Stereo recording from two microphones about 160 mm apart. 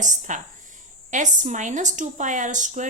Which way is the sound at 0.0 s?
50° right (ahead or behind).